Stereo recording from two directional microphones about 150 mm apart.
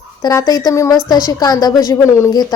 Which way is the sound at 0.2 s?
25° left (ahead or behind).